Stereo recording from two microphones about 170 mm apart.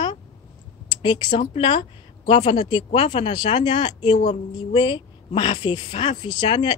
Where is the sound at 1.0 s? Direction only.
30° left (ahead or behind).